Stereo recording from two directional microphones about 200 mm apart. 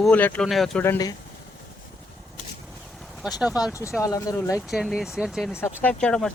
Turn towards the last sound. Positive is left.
turn(degrees=5)  # may be behind; listen again after turning